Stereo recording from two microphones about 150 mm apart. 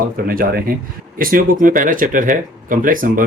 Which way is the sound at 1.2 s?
70° right (ahead or behind).